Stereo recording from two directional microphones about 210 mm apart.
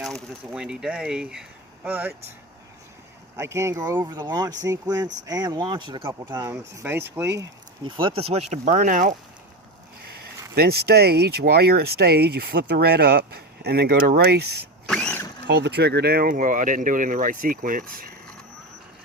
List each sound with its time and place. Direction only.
0.0 s speech: centre (ahead or behind)
3.3 s speech: 15° right (ahead or behind)
7.9 s speech: 25° right (ahead or behind)
10.5 s speech: 50° right (ahead or behind)
14.8 s vehicle: 5° left (ahead or behind)
15.4 s speech: 55° right (ahead or behind)